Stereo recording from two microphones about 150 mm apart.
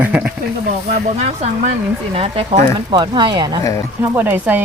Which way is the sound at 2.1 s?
40° right (ahead or behind).